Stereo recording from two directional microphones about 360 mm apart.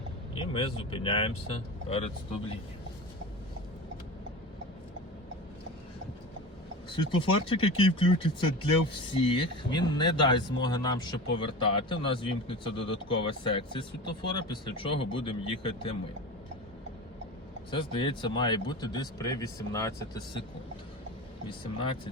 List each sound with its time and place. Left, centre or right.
0.5 s speech: centre
6.9 s speech: centre
17.7 s speech: centre
21.4 s speech: centre